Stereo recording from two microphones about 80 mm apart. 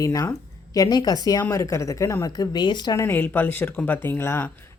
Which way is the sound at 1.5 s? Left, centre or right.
Left.